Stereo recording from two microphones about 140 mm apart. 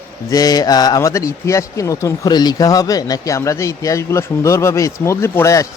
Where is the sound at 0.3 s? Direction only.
25° left (ahead or behind).